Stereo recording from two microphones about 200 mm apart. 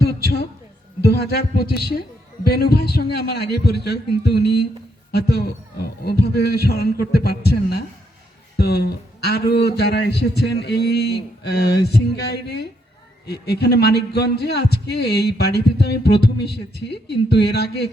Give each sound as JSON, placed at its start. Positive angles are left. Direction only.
{"t": 1.0, "sound": "a man's voice", "side_deg": 50}